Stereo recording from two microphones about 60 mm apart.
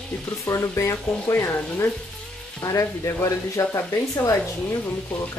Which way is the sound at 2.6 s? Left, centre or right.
Left.